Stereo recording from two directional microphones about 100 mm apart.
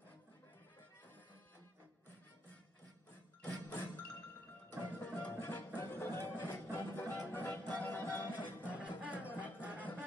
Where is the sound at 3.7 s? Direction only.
20° left (ahead or behind).